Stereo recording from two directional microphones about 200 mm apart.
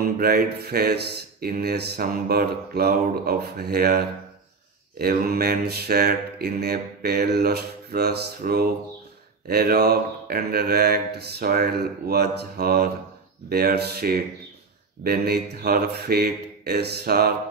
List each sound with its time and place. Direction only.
0.2 s speech: 50° right (ahead or behind)